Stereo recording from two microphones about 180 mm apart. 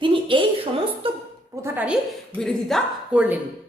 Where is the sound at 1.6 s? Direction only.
10° right (ahead or behind).